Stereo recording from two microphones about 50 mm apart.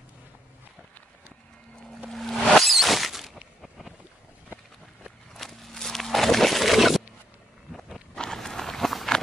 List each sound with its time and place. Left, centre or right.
2.0 s music: centre
3.6 s boat: centre
5.3 s a sound: centre
8.2 s run: centre